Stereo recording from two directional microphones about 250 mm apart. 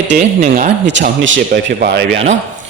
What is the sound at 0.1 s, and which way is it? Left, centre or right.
Speech, right.